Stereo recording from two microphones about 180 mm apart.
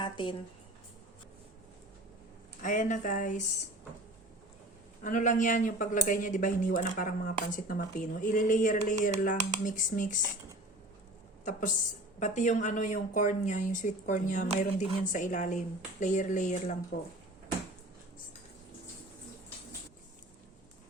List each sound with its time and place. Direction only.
0.0 s a woman's voice: 25° left (ahead or behind)
2.6 s speech: 45° left (ahead or behind)
5.0 s speech: 45° left (ahead or behind)
12.2 s speech: 40° left (ahead or behind)